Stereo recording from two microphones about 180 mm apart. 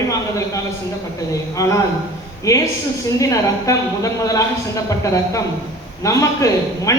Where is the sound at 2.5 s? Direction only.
20° left (ahead or behind).